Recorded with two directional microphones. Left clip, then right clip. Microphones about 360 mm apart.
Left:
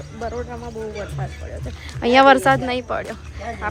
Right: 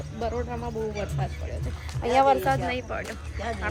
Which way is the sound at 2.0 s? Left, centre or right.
Left.